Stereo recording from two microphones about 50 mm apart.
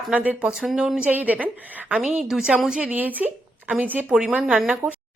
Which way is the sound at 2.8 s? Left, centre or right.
Right.